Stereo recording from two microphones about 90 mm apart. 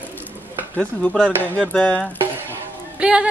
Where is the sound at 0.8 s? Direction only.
10° left (ahead or behind).